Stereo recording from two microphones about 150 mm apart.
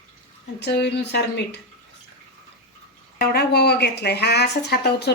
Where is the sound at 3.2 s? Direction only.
90° left.